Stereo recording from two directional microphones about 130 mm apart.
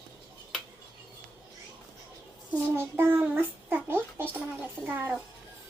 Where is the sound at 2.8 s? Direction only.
15° right (ahead or behind).